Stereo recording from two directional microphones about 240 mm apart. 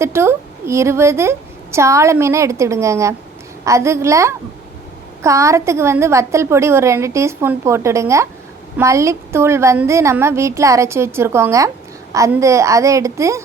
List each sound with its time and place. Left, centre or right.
0.0 s a woman's voice: centre